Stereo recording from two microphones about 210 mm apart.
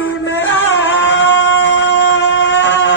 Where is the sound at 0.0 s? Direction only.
60° left (ahead or behind).